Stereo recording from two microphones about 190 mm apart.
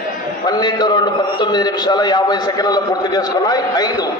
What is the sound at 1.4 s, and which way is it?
A man's voice, 20° left (ahead or behind).